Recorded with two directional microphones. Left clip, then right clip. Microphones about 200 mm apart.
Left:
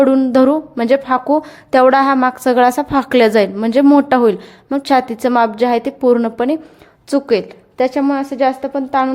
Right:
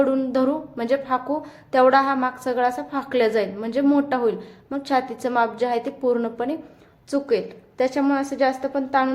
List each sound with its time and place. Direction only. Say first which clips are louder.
0.0 s a woman's voice: left 9 dB; 40° left (ahead or behind)